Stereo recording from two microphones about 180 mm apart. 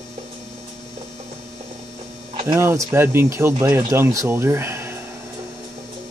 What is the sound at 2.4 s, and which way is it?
Speech, 15° right (ahead or behind).